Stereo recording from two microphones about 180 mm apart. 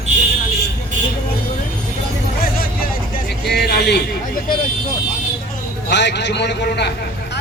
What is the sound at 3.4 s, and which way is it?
Speech, 65° left (ahead or behind).